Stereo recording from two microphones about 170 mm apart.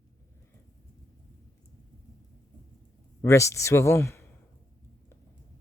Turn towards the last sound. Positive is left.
turn(degrees=15)  # may be behind; listen again after turning